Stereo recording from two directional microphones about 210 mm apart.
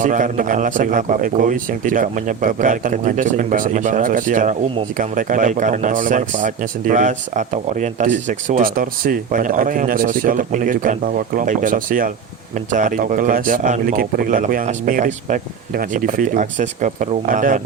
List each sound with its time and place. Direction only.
0.0 s speech: 40° right (ahead or behind)